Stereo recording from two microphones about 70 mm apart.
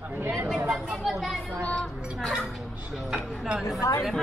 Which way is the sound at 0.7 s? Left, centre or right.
Centre.